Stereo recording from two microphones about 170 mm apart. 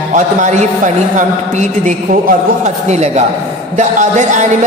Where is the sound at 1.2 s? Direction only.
45° right (ahead or behind).